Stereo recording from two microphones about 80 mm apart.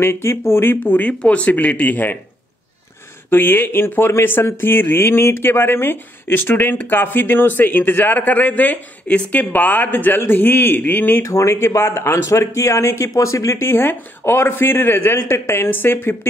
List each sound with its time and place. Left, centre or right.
0.0 s speech: left
3.3 s speech: left
11.2 s speech: left